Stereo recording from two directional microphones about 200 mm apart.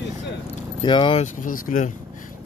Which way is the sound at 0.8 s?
25° left (ahead or behind).